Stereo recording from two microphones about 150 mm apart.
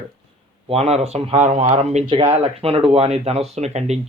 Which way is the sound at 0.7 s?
45° right (ahead or behind).